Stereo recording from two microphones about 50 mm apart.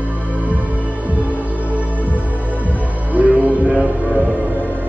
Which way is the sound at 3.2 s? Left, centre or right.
Right.